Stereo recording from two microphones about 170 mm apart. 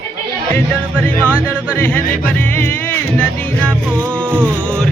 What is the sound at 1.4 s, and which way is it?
Music, 10° left (ahead or behind).